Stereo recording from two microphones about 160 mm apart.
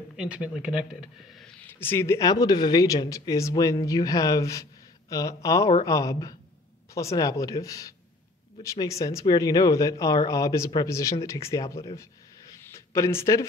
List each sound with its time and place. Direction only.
0.1 s speech: 5° right (ahead or behind)
1.6 s speech: 15° left (ahead or behind)